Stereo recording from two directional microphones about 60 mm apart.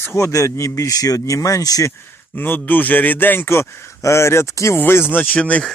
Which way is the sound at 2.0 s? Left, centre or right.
Left.